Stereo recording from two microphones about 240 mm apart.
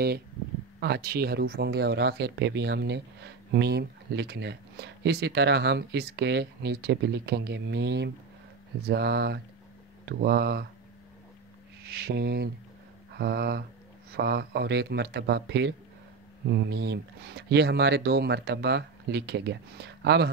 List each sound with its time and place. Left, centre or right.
0.7 s speech: right
11.8 s speech: right